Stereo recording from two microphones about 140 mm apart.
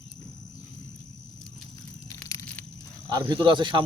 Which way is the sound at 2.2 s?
15° left (ahead or behind).